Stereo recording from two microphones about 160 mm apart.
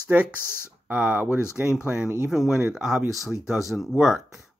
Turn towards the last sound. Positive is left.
turn(degrees=-5)  # may be behind; listen again after turning